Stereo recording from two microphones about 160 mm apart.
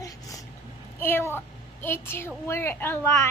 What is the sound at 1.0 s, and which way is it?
A woman's voice, 15° left (ahead or behind).